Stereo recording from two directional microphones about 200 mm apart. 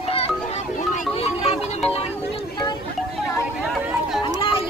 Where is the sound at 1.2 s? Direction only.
30° left (ahead or behind).